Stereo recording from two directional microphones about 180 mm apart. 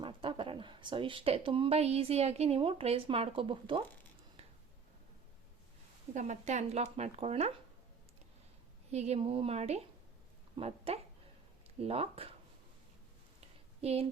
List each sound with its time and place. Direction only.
0.0 s speech: 30° right (ahead or behind)
4.4 s a sound: 35° right (ahead or behind)
6.1 s speech: 40° right (ahead or behind)
8.9 s speech: 35° right (ahead or behind)
13.8 s speech: 35° right (ahead or behind)